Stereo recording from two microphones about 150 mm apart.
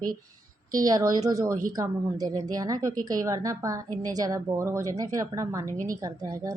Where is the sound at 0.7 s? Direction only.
25° right (ahead or behind).